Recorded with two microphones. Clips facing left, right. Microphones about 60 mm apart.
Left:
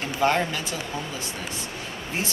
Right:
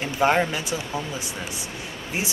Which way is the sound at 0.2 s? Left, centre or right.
Centre.